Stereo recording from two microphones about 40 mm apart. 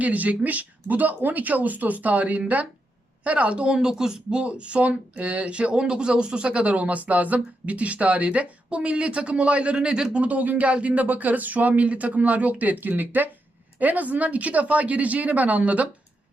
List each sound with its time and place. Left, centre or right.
0.0 s speech: right
10.2 s speech: right
10.7 s speech: right